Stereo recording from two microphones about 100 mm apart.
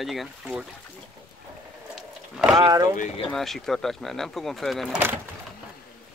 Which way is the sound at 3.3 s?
5° left (ahead or behind).